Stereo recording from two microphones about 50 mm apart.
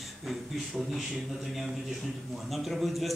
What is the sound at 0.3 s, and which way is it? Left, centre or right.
A man's voice, centre.